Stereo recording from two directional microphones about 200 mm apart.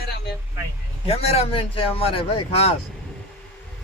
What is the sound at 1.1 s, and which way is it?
Speech, 30° left (ahead or behind).